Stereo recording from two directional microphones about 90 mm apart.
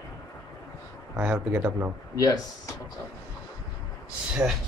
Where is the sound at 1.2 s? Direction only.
15° right (ahead or behind).